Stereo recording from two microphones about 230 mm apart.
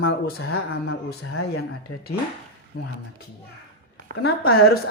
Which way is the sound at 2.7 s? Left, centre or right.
Left.